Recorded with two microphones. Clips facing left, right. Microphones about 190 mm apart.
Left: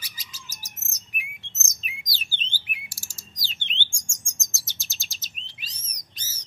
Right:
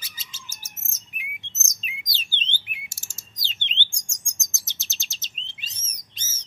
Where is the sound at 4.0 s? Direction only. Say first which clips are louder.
Left 2 dB; 20° right (ahead or behind).